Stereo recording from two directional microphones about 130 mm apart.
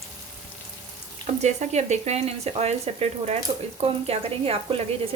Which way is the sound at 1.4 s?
60° right (ahead or behind).